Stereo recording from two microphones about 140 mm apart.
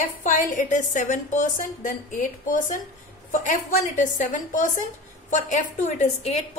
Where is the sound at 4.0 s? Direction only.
65° left (ahead or behind).